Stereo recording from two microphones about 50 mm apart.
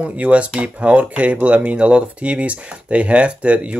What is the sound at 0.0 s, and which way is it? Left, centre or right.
Speech, right.